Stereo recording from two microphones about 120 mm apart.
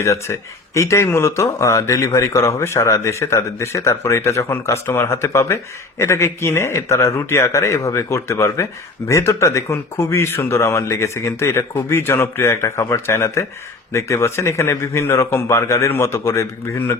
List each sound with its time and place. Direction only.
0.0 s speech: 25° left (ahead or behind)